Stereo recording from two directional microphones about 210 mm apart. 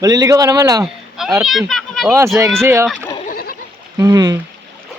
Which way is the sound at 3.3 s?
45° left (ahead or behind).